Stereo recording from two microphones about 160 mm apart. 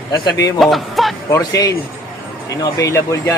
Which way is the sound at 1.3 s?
20° left (ahead or behind).